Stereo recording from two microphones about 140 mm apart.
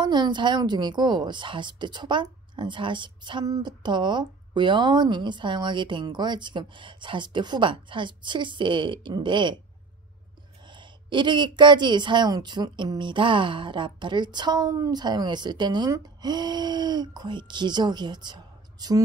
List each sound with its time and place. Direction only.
0.0 s a woman's voice: 30° right (ahead or behind)
10.7 s a woman's voice: 35° right (ahead or behind)